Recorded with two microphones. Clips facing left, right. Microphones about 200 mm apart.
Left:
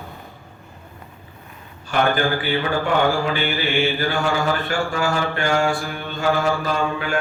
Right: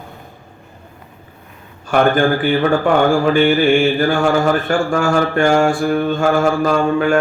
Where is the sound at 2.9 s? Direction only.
50° right (ahead or behind).